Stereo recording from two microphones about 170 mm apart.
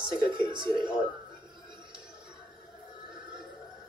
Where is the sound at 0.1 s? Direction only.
25° right (ahead or behind).